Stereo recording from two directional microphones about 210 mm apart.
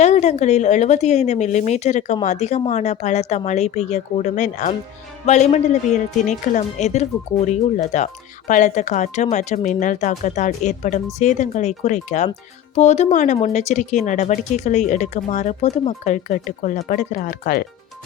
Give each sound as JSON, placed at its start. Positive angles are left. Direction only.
{"t": 0.0, "sound": "speech", "side_deg": 30}